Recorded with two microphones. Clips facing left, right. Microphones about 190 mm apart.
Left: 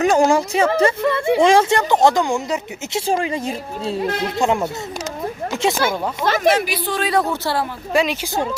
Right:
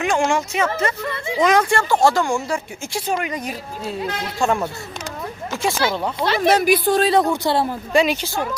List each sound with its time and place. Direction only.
0.0 s a woman's voice: 40° left (ahead or behind); by 5.8 s 20° left (ahead or behind)
6.2 s speech: 45° left (ahead or behind)
6.5 s a woman's voice: 45° right (ahead or behind)
7.1 s a woman's voice: 20° right (ahead or behind)
7.9 s speech: centre (ahead or behind)